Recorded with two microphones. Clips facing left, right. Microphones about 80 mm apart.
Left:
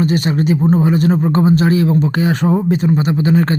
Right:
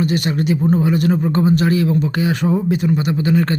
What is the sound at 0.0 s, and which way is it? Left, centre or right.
Speech, left.